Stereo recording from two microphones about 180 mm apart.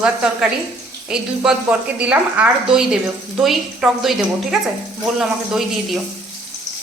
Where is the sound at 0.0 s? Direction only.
5° right (ahead or behind).